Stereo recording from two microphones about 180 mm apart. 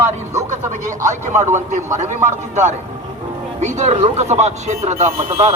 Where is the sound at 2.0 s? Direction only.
40° right (ahead or behind).